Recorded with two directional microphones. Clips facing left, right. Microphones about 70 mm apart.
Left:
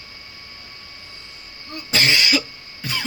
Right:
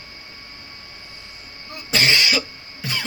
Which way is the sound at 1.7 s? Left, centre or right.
Centre.